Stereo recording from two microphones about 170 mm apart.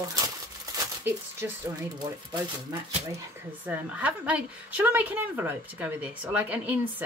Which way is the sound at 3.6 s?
10° right (ahead or behind).